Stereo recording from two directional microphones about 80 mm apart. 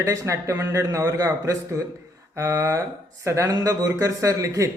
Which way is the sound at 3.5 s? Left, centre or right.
Right.